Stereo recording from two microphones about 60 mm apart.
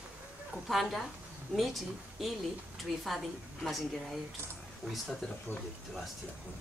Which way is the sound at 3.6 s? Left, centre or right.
Centre.